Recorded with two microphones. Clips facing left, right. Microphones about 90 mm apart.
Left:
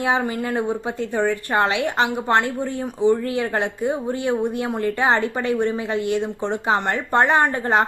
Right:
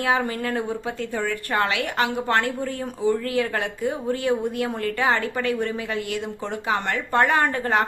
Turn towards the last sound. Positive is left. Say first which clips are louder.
# left 3 dB
turn(degrees=25)  # may be behind; listen again after turning